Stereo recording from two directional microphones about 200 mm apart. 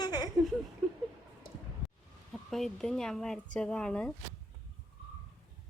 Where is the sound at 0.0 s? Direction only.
20° left (ahead or behind).